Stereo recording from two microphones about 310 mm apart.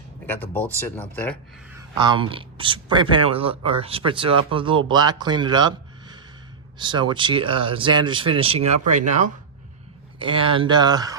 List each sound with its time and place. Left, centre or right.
1.1 s speech: centre
2.0 s speech: centre